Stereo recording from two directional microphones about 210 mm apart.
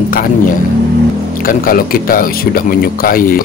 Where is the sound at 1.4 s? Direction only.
40° left (ahead or behind).